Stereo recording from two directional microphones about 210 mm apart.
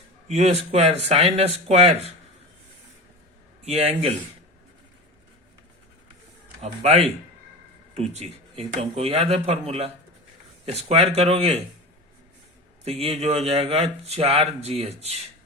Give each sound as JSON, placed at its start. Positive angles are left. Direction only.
{"t": 0.3, "sound": "speech", "side_deg": -30}
{"t": 3.7, "sound": "speech", "side_deg": -30}
{"t": 6.6, "sound": "speech", "side_deg": -30}
{"t": 8.1, "sound": "speech", "side_deg": -30}
{"t": 12.8, "sound": "speech", "side_deg": -30}